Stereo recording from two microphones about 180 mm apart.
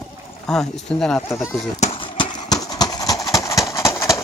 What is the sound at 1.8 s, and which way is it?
Clip-clop, 30° left (ahead or behind).